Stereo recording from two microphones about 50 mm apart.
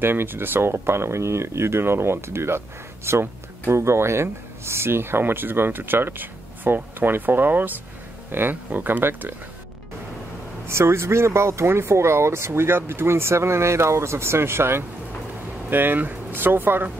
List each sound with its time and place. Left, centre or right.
0.0 s speech: right
10.7 s speech: right
15.7 s speech: right